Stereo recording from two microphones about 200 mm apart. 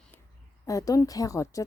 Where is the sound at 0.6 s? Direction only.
15° left (ahead or behind).